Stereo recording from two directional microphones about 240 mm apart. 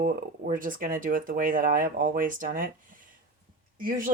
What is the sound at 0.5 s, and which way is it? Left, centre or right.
Speech, right.